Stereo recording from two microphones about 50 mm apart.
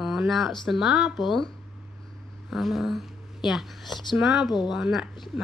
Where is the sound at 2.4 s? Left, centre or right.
Centre.